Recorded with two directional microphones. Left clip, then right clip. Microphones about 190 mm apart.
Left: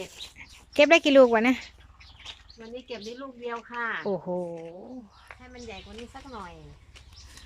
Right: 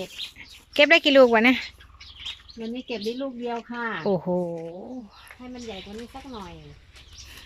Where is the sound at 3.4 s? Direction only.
30° right (ahead or behind).